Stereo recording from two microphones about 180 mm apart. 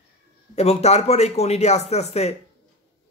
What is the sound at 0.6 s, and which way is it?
Speech, 35° left (ahead or behind).